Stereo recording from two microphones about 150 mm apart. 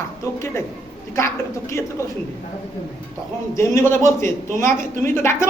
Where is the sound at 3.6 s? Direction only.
20° left (ahead or behind).